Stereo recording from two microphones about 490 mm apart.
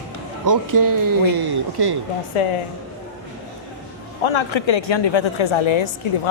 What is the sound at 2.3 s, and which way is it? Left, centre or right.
Speech, left.